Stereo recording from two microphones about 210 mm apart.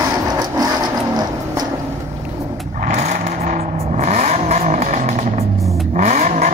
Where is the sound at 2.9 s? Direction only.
35° right (ahead or behind).